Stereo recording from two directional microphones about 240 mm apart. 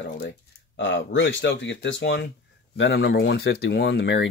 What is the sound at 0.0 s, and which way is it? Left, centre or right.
Speech, left.